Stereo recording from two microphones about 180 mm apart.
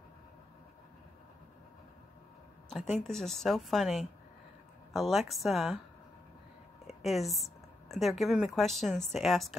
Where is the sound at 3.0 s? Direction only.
Centre (ahead or behind).